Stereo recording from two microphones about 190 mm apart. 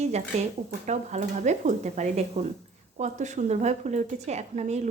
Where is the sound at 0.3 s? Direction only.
35° right (ahead or behind).